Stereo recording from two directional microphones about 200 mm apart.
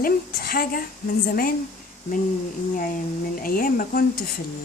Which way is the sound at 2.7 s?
45° left (ahead or behind).